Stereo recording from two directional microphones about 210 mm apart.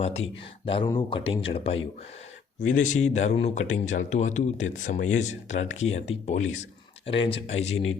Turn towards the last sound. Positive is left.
turn(degrees=30)  # may be behind; listen again after turning